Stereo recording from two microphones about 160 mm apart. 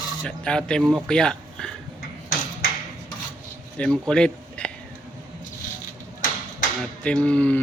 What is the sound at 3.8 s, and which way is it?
Speech, 5° left (ahead or behind).